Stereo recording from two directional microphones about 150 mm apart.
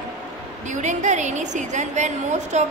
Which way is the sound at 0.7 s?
50° right (ahead or behind).